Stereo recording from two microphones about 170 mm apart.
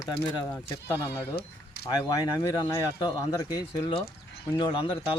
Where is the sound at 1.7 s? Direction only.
70° left (ahead or behind).